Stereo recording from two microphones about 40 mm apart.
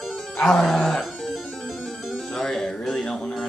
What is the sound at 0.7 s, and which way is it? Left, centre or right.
Speech, centre.